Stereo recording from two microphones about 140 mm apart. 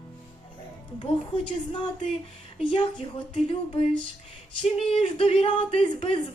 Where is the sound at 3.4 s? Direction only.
45° left (ahead or behind).